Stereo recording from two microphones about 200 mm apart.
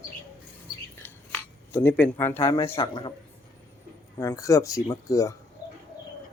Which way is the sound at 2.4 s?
25° left (ahead or behind).